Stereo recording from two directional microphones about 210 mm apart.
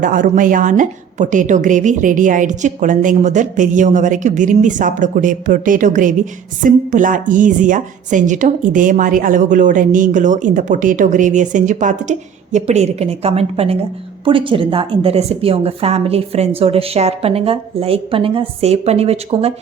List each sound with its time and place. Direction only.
0.0 s a woman's voice: 40° right (ahead or behind)